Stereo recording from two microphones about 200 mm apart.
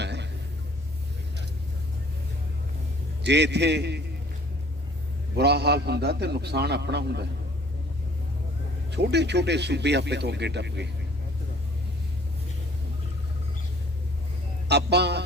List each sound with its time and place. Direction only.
0.0 s a sound: 60° right (ahead or behind)
3.2 s speech: 60° right (ahead or behind)
5.4 s speech: 55° right (ahead or behind)
8.9 s speech: 55° right (ahead or behind)
14.7 s music: 55° right (ahead or behind)